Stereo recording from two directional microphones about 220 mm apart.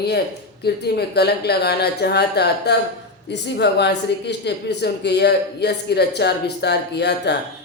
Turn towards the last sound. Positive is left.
turn(degrees=50)  # may be behind; listen again after turning